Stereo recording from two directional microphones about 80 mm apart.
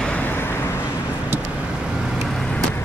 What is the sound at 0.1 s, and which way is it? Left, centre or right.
Vehicle, left.